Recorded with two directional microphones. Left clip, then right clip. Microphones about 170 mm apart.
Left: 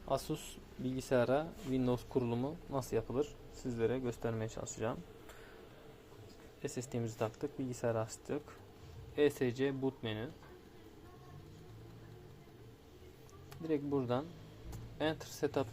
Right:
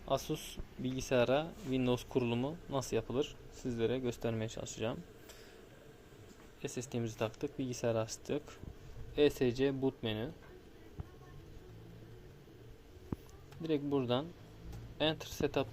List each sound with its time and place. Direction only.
0.1 s speech: 10° right (ahead or behind)
6.6 s speech: 10° right (ahead or behind)
13.6 s speech: 15° right (ahead or behind)